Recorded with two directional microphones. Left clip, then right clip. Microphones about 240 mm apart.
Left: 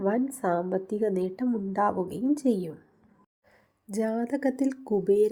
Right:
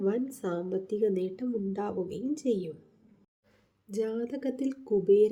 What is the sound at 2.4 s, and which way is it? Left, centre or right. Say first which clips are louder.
Speech: left 3 dB; left.